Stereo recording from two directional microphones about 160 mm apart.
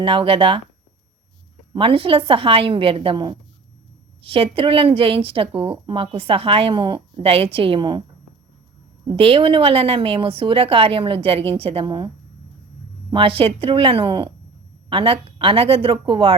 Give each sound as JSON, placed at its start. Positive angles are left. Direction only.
{"t": 0.0, "sound": "a woman's voice", "side_deg": -30}
{"t": 1.7, "sound": "a woman's voice", "side_deg": -35}
{"t": 9.0, "sound": "a woman's voice", "side_deg": -35}
{"t": 13.1, "sound": "a woman's voice", "side_deg": -35}